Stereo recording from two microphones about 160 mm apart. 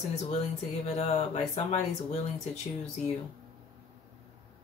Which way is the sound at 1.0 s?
45° left (ahead or behind).